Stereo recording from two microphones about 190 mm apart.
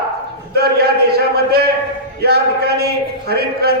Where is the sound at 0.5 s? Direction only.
55° right (ahead or behind).